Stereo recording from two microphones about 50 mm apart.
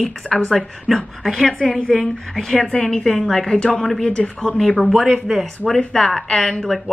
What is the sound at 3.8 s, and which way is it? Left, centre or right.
Speech, centre.